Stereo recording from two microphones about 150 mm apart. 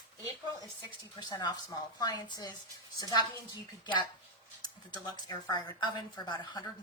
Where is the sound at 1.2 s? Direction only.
25° left (ahead or behind).